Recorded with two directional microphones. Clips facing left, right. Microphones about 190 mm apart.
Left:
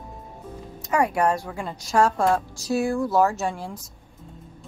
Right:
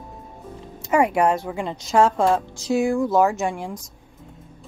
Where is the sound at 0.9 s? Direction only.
25° right (ahead or behind).